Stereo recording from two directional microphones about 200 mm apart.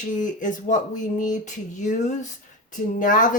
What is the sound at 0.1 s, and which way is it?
Speech, 40° left (ahead or behind).